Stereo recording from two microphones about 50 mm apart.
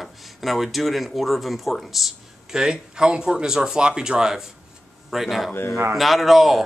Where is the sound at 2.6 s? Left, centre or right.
Centre.